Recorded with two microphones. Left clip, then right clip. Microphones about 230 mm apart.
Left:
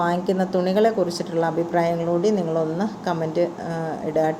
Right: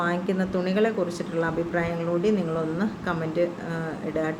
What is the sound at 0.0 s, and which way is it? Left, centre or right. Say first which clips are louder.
A woman's voice: left 5 dB; centre.